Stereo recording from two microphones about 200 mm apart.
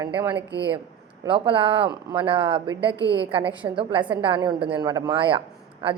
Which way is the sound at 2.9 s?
15° left (ahead or behind).